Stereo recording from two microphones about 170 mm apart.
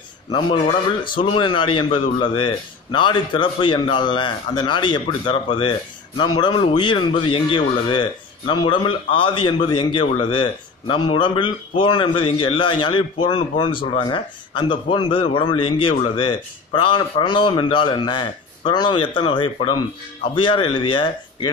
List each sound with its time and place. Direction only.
0.3 s speech: 25° left (ahead or behind)